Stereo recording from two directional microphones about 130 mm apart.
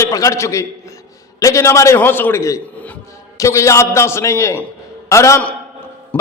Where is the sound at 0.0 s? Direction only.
25° left (ahead or behind).